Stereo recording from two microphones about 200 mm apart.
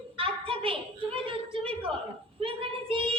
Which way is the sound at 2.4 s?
25° right (ahead or behind).